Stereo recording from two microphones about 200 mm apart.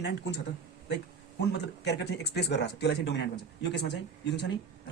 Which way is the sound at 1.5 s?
60° left (ahead or behind).